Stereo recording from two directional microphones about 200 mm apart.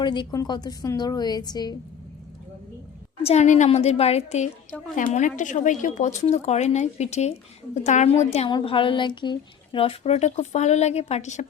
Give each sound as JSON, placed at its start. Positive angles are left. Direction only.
{"t": 0.0, "sound": "a woman's voice", "side_deg": 25}
{"t": 3.2, "sound": "speech", "side_deg": 35}